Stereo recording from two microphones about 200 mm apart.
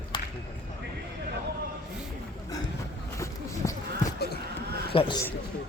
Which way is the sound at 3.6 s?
15° left (ahead or behind).